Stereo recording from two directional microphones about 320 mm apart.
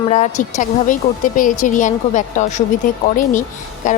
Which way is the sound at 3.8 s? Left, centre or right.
Left.